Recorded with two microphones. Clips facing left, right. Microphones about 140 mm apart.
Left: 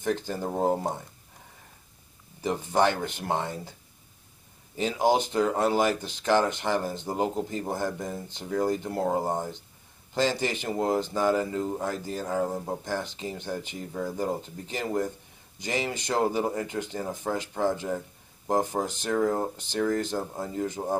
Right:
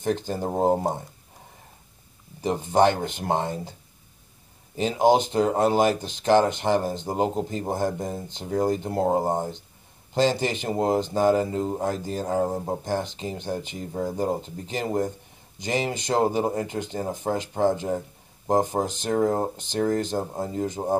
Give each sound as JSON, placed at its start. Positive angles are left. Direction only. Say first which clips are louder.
{"t": 0.0, "sound": "speech", "louder": "right 3 dB", "side_deg": -25}
{"t": 2.4, "sound": "speech", "louder": "right 4 dB", "side_deg": -20}
{"t": 4.7, "sound": "speech", "louder": "right 4 dB", "side_deg": -20}